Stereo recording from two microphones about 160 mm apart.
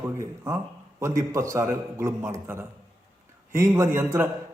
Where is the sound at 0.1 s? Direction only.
15° right (ahead or behind).